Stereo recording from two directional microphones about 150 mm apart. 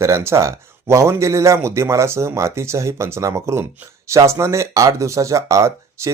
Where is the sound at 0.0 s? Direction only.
20° right (ahead or behind).